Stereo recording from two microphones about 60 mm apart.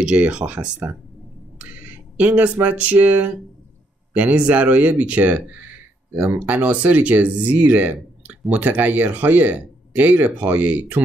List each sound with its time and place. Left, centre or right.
0.0 s speech: centre